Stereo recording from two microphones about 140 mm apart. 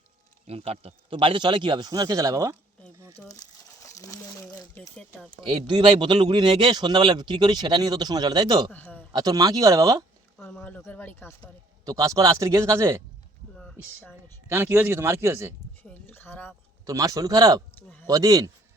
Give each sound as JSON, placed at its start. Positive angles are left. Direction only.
{"t": 0.4, "sound": "speech", "side_deg": -45}
{"t": 3.2, "sound": "speech", "side_deg": 5}
{"t": 3.8, "sound": "speech", "side_deg": 20}
{"t": 5.4, "sound": "speech", "side_deg": -35}
{"t": 8.7, "sound": "a man's voice", "side_deg": 10}
{"t": 9.1, "sound": "speech", "side_deg": -25}
{"t": 10.3, "sound": "speech", "side_deg": 10}
{"t": 11.9, "sound": "speech", "side_deg": -25}
{"t": 13.6, "sound": "a sound", "side_deg": 5}
{"t": 14.5, "sound": "speech", "side_deg": -15}
{"t": 15.8, "sound": "speech", "side_deg": 15}
{"t": 16.8, "sound": "speech", "side_deg": -25}
{"t": 17.7, "sound": "a sound", "side_deg": 15}
{"t": 18.1, "sound": "speech", "side_deg": -25}